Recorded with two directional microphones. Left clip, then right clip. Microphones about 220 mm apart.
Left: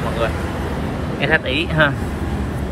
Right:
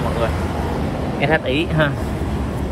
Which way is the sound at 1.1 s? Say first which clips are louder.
Left 1 dB; 10° right (ahead or behind).